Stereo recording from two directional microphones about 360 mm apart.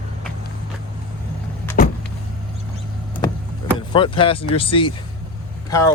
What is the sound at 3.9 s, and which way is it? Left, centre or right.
Speech, centre.